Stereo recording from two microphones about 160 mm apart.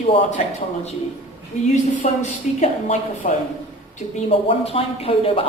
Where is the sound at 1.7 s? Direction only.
45° left (ahead or behind).